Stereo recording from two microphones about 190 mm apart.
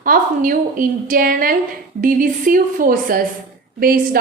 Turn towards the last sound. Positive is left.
turn(degrees=-50)  # may be behind; listen again after turning